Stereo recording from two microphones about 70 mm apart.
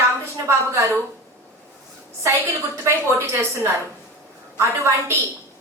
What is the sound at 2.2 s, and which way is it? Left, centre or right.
A woman's voice, right.